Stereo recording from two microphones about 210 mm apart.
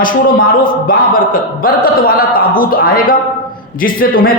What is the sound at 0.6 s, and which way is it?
Speech, 40° left (ahead or behind).